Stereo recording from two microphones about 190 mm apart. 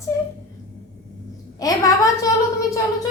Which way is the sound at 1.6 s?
20° left (ahead or behind).